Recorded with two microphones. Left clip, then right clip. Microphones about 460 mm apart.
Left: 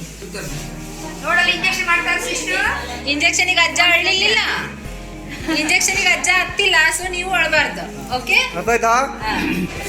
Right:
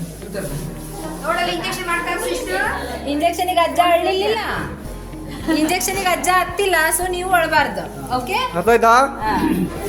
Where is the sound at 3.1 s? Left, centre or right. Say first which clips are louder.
Left 2 dB; right.